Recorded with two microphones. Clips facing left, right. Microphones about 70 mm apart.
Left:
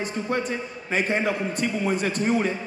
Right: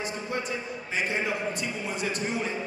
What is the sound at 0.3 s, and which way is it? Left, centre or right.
A man's voice, left.